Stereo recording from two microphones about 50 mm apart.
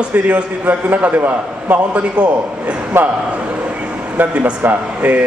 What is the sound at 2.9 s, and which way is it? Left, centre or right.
Speech, right.